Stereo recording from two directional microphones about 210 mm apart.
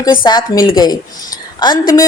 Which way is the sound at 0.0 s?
20° left (ahead or behind).